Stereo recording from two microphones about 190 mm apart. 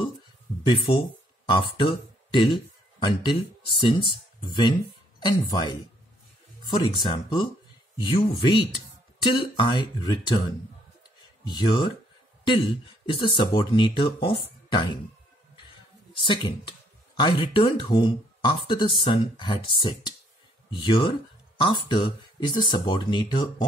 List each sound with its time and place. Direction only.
1.4 s speech: 25° left (ahead or behind)
11.4 s speech: 25° left (ahead or behind)
16.2 s speech: 25° left (ahead or behind)